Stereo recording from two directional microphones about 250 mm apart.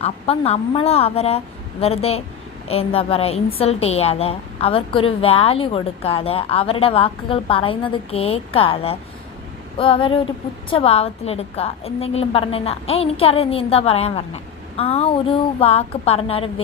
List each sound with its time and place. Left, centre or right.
0.0 s a woman's voice: left